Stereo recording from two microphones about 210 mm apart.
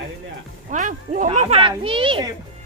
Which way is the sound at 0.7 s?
35° right (ahead or behind).